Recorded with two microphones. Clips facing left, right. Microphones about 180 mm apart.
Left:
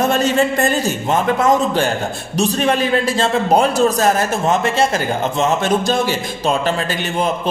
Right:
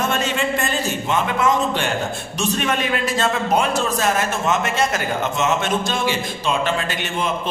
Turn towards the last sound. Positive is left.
turn(degrees=35)  # may be behind; listen again after turning